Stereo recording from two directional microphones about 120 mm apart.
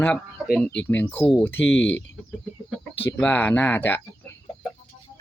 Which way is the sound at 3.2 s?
10° left (ahead or behind).